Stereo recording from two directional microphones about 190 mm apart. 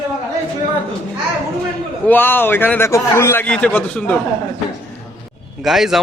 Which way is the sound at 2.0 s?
10° left (ahead or behind).